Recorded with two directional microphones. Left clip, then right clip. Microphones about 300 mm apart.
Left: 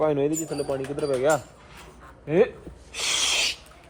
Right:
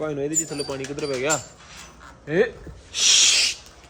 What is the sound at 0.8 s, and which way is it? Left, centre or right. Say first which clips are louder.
Speech: left 1 dB; left.